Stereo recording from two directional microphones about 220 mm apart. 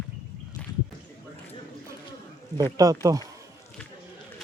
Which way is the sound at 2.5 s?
15° right (ahead or behind).